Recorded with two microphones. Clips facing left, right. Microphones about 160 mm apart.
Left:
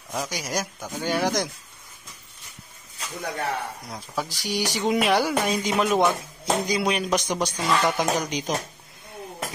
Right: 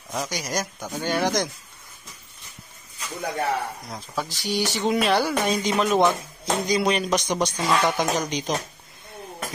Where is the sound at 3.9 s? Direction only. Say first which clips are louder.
Left 2 dB; 10° left (ahead or behind).